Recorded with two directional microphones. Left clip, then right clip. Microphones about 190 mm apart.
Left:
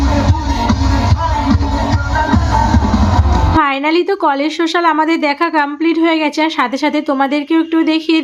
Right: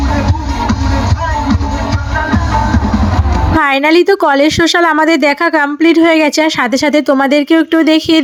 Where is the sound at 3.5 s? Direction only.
35° right (ahead or behind).